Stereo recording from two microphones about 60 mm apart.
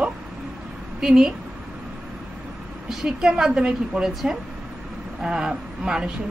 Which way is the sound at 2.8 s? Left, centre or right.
Centre.